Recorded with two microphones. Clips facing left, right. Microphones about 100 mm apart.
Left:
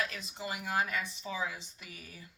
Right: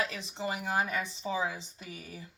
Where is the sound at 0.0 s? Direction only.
25° right (ahead or behind).